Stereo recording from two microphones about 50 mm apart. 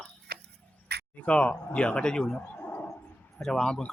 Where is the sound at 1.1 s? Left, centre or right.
Left.